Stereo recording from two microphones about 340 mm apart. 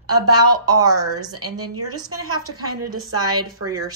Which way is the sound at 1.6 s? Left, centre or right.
Right.